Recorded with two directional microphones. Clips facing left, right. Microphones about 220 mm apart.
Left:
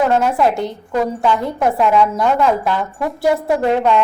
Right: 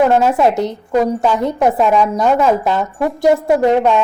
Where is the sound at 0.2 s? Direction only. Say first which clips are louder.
Right 3 dB; 20° right (ahead or behind).